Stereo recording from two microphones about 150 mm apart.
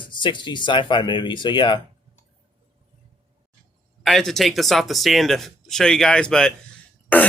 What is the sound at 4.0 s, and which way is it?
Speech, centre (ahead or behind).